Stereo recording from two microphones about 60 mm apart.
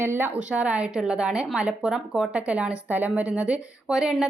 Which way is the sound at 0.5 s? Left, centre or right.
Right.